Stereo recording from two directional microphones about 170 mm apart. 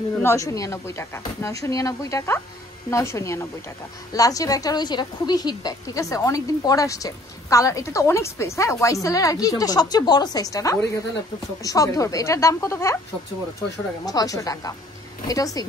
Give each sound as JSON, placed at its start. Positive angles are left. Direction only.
{"t": 0.2, "sound": "a woman's voice", "side_deg": 15}
{"t": 14.0, "sound": "a woman's voice", "side_deg": 20}